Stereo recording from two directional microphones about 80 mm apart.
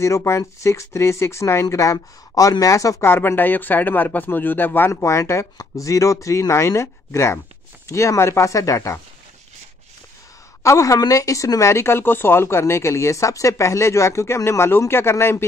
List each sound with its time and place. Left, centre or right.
0.0 s speech: left
3.1 s speech: left
5.0 s speech: left
10.6 s speech: left